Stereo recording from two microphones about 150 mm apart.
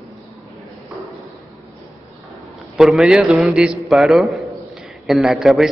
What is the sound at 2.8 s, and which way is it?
A man's voice, centre (ahead or behind).